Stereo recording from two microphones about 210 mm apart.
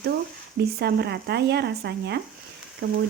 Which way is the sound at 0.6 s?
50° right (ahead or behind).